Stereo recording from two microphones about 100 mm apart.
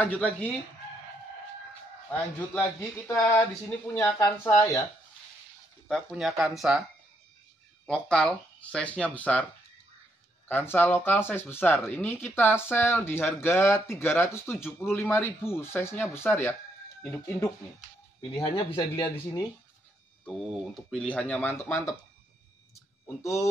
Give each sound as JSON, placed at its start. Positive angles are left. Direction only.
{"t": 0.0, "sound": "speech", "side_deg": 15}
{"t": 2.5, "sound": "speech", "side_deg": 20}
{"t": 5.9, "sound": "speech", "side_deg": 0}
{"t": 7.8, "sound": "speech", "side_deg": 5}
{"t": 10.5, "sound": "speech", "side_deg": 20}
{"t": 18.5, "sound": "speech", "side_deg": 50}
{"t": 20.2, "sound": "speech", "side_deg": 5}
{"t": 23.0, "sound": "speech", "side_deg": 30}